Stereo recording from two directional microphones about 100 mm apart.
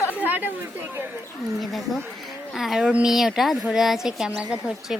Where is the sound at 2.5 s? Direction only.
Centre (ahead or behind).